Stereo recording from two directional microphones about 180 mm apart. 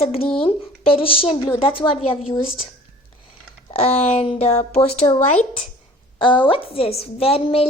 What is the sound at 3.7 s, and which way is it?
A woman's voice, 35° left (ahead or behind).